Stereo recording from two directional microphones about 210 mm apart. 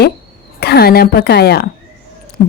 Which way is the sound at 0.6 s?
50° left (ahead or behind).